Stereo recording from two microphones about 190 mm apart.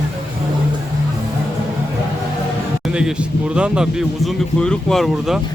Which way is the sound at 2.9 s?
5° right (ahead or behind).